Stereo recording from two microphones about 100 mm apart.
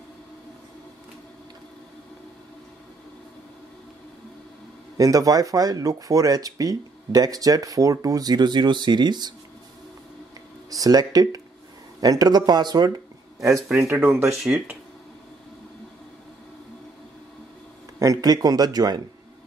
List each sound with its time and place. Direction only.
4.9 s speech: 35° right (ahead or behind)
10.7 s speech: 40° right (ahead or behind)
13.4 s speech: 30° right (ahead or behind)
17.9 s speech: 35° right (ahead or behind)